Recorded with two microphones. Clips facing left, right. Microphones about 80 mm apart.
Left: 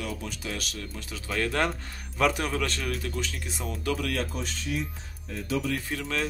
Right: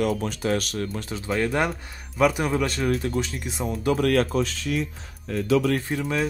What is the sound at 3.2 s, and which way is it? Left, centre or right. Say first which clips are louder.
Speech: right 6 dB; right.